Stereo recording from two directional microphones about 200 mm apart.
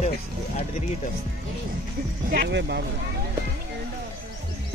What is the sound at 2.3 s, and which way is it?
Speech, 55° right (ahead or behind).